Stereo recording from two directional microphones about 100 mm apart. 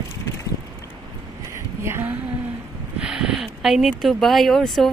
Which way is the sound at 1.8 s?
25° right (ahead or behind).